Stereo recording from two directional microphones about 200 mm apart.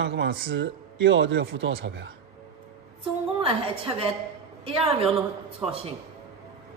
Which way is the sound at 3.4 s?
25° right (ahead or behind).